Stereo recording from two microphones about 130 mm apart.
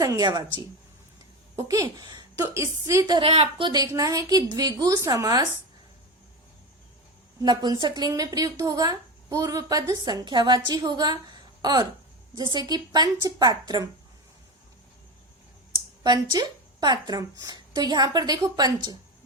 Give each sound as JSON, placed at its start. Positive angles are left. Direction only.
{"t": 0.0, "sound": "a woman's voice", "side_deg": -30}
{"t": 3.2, "sound": "a woman's voice", "side_deg": -50}
{"t": 3.7, "sound": "a woman's voice", "side_deg": -30}
{"t": 7.4, "sound": "speech", "side_deg": -35}
{"t": 16.0, "sound": "speech", "side_deg": -30}